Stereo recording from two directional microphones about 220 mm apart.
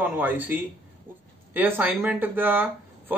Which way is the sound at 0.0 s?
10° right (ahead or behind).